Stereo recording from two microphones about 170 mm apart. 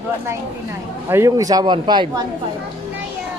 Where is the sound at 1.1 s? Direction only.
20° right (ahead or behind).